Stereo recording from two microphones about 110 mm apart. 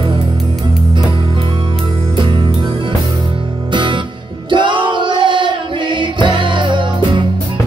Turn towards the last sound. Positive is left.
turn(degrees=-45)  # may be behind; listen again after turning